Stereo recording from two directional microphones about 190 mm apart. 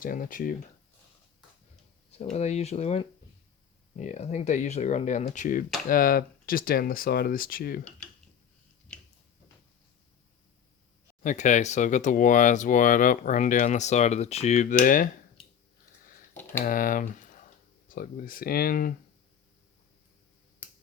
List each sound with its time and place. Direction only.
0.0 s speech: 45° left (ahead or behind)
2.3 s speech: 35° left (ahead or behind)
7.9 s mechanisms: 5° left (ahead or behind)
8.9 s a sound: 5° left (ahead or behind)
11.2 s speech: 40° left (ahead or behind)
16.6 s speech: 45° left (ahead or behind)